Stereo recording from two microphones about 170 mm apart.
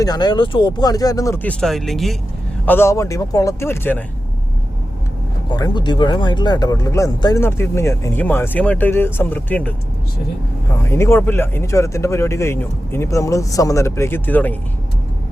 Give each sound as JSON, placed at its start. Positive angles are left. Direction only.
{"t": 0.0, "sound": "speech", "side_deg": 25}
{"t": 2.6, "sound": "speech", "side_deg": 15}
{"t": 5.5, "sound": "speech", "side_deg": 25}
{"t": 10.8, "sound": "speech", "side_deg": 15}